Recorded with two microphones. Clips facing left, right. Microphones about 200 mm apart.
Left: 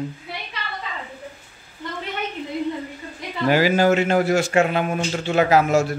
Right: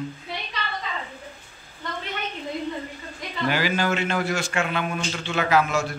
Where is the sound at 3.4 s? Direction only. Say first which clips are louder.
Left 7 dB; 40° left (ahead or behind).